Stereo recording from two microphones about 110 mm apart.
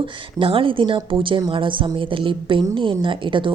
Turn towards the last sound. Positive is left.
turn(degrees=-50)  # may be behind; listen again after turning